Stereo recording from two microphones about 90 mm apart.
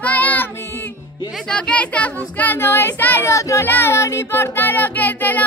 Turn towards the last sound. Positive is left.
turn(degrees=20)  # may be behind; listen again after turning